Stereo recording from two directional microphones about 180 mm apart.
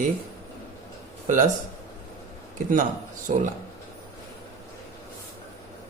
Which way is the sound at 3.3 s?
40° right (ahead or behind).